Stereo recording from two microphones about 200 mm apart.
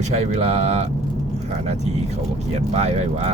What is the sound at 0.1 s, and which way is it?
Speech, 30° right (ahead or behind).